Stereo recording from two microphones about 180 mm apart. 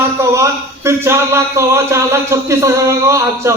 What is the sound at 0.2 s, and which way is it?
A man's voice, 15° right (ahead or behind).